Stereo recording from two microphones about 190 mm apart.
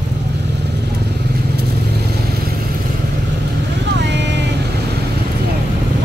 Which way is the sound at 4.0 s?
65° right (ahead or behind).